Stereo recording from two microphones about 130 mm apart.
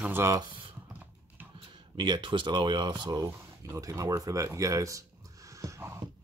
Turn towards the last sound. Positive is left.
turn(degrees=-20)  # may be behind; listen again after turning